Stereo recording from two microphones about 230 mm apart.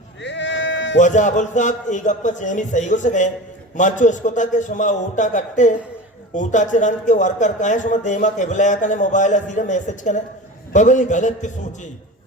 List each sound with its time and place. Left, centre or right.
0.2 s sheep: left
0.9 s speech: left